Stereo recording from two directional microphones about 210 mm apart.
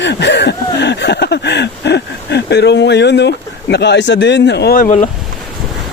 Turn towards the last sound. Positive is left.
turn(degrees=35)  # may be behind; listen again after turning